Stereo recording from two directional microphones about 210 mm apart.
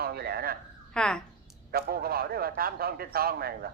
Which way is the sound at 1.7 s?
45° right (ahead or behind).